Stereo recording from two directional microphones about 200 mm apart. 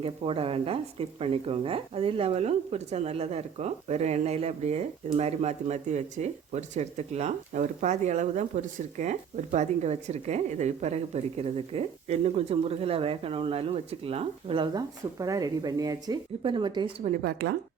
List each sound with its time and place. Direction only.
0.0 s speech: 30° right (ahead or behind)
17.2 s speech: 55° right (ahead or behind)